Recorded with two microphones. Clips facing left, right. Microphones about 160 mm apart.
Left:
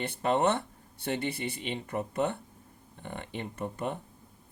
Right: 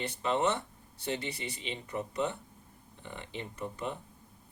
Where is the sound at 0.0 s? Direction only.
55° left (ahead or behind).